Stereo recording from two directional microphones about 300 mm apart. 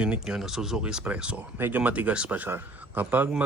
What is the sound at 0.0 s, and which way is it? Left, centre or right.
Speech, centre.